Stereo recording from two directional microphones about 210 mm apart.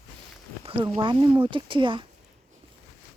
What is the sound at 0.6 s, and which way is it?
Speech, 25° right (ahead or behind).